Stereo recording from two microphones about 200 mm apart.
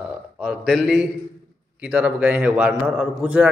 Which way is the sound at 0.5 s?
5° right (ahead or behind).